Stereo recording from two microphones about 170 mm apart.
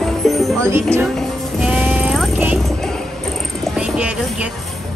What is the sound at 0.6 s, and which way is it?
Speech, 15° right (ahead or behind).